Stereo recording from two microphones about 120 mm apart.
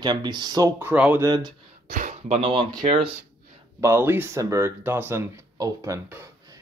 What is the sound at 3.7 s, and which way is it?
Speech, 20° right (ahead or behind).